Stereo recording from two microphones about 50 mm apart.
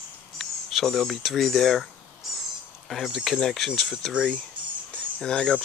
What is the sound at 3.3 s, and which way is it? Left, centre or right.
Speech, centre.